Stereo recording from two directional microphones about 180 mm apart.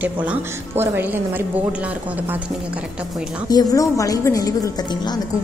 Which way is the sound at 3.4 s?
20° left (ahead or behind).